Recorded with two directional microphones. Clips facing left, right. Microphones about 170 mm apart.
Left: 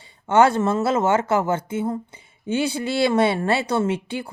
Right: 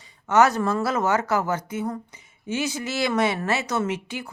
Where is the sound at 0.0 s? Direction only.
30° left (ahead or behind).